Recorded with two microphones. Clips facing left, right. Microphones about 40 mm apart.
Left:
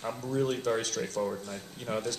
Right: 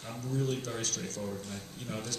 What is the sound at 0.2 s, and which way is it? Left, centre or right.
Speech, left.